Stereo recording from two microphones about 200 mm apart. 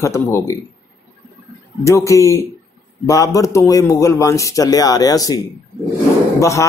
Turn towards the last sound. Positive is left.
turn(degrees=15)  # may be behind; listen again after turning